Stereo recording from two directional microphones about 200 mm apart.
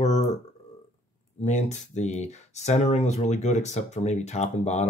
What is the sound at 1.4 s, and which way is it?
Speech, 35° left (ahead or behind).